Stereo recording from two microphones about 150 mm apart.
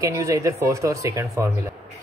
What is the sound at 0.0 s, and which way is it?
Speech, 20° right (ahead or behind).